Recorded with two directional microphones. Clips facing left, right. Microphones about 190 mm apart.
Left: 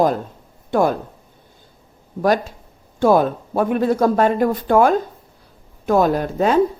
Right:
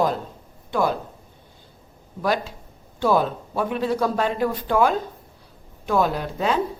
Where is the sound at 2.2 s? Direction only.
45° left (ahead or behind).